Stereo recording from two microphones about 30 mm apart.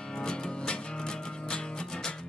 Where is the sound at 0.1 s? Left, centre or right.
Left.